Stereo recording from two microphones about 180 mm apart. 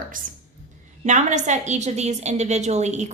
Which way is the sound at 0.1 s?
50° right (ahead or behind).